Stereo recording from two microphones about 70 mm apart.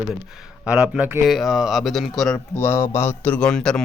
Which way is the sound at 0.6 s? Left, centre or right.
Centre.